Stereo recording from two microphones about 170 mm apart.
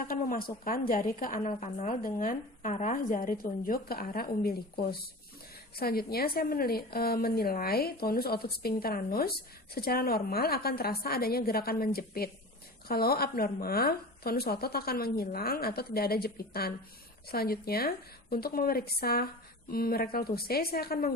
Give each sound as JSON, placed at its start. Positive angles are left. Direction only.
{"t": 0.0, "sound": "speech", "side_deg": 55}
{"t": 1.4, "sound": "speech", "side_deg": 45}